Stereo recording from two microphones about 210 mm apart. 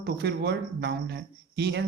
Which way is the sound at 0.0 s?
50° right (ahead or behind).